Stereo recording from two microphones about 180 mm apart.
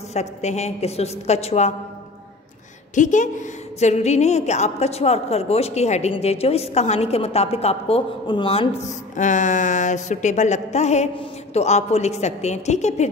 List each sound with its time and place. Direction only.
0.1 s a woman's voice: 40° left (ahead or behind)
2.9 s a woman's voice: 45° left (ahead or behind)
9.1 s a woman's voice: 45° left (ahead or behind)